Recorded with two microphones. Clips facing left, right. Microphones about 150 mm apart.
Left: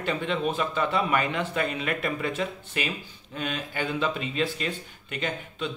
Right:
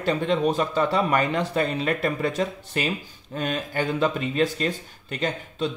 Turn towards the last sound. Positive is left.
turn(degrees=-35)  # may be behind; listen again after turning